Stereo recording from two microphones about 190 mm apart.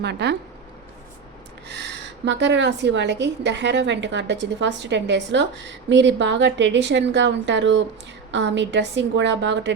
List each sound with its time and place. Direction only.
0.0 s speech: 60° right (ahead or behind)
1.6 s a woman's voice: 65° right (ahead or behind)